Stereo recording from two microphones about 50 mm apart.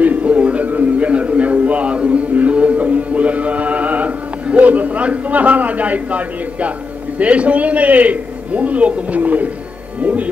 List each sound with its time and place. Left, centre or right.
0.0 s a sound: right
7.2 s a man's voice: right
10.0 s music: right